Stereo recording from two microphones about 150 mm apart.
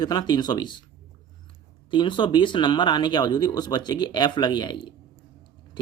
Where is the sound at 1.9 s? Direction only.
30° left (ahead or behind).